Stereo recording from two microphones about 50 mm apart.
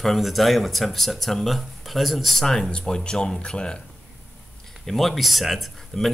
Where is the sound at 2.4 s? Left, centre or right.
Centre.